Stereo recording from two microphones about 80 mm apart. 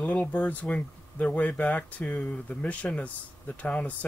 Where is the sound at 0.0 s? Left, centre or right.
Centre.